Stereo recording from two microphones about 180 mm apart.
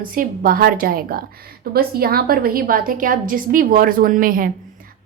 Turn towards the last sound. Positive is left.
turn(degrees=-50)  # may be behind; listen again after turning